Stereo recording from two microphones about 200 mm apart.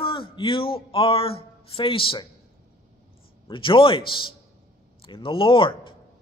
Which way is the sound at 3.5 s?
25° left (ahead or behind).